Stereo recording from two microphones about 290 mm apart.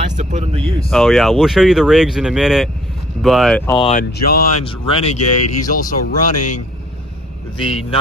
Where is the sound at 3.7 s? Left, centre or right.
Centre.